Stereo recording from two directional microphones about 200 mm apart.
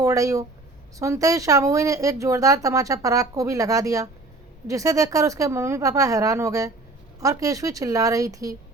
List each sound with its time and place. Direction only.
0.0 s speech: 15° right (ahead or behind)